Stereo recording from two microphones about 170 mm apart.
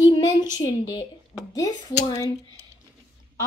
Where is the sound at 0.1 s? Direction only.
25° left (ahead or behind).